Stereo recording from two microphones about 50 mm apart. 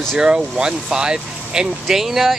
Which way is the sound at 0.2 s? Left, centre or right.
Centre.